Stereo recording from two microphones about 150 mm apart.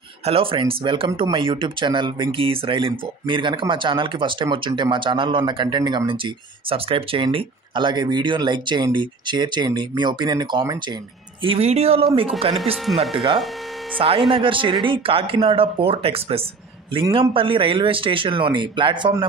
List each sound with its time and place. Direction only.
0.2 s speech: 40° right (ahead or behind)
11.4 s speech: 40° right (ahead or behind)